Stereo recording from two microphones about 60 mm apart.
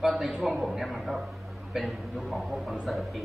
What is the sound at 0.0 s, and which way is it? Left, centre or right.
Speech, centre.